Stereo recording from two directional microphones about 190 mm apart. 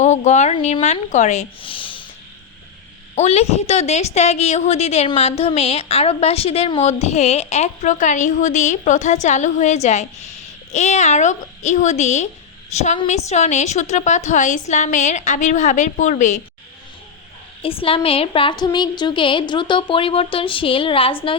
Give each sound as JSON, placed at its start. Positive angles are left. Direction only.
{"t": 0.0, "sound": "a woman's voice", "side_deg": 40}
{"t": 3.2, "sound": "a woman's voice", "side_deg": 35}
{"t": 17.6, "sound": "a woman's voice", "side_deg": 30}